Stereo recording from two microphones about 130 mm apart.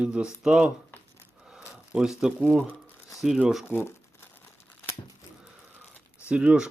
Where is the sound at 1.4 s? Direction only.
5° right (ahead or behind).